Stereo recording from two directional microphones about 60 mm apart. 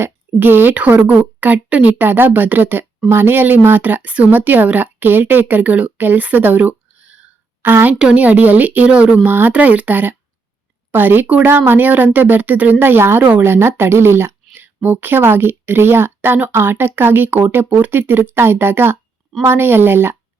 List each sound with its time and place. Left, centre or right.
0.0 s speech: right
0.8 s speech: right
7.0 s a sound: centre
7.6 s speech: right
7.9 s a woman's voice: centre
8.2 s speech: right
9.2 s speech: right
11.4 s speech: right
12.8 s speech: right
14.5 s speech: right